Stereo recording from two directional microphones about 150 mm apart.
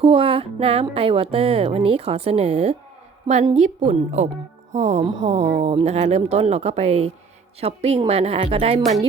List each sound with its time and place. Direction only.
0.0 s speech: 40° right (ahead or behind)